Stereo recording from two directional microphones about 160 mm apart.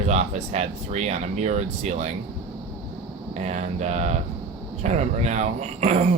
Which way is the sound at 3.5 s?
45° right (ahead or behind).